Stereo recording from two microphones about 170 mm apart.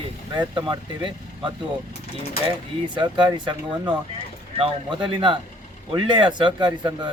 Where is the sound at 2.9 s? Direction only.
25° right (ahead or behind).